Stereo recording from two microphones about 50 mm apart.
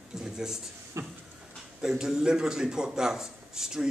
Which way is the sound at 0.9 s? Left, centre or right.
Right.